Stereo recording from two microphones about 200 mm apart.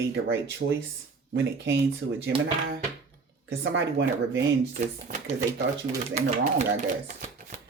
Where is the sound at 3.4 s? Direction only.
65° right (ahead or behind).